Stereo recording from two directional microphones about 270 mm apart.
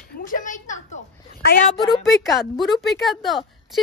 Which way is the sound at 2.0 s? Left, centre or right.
Centre.